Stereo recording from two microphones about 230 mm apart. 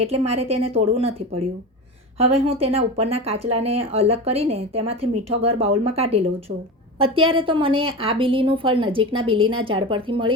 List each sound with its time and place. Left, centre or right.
0.0 s a woman's voice: right